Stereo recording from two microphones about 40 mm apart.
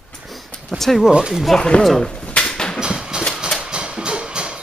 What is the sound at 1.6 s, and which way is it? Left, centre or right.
Speech, left.